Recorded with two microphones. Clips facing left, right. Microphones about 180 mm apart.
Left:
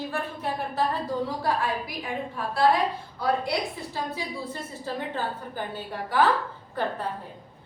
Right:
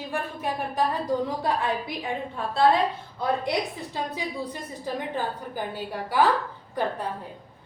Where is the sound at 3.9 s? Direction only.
15° right (ahead or behind).